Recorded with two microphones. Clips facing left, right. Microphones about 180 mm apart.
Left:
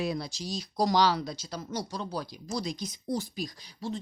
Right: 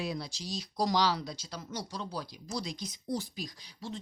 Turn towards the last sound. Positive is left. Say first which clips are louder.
# left 6 dB
turn(degrees=45)  # may be behind; listen again after turning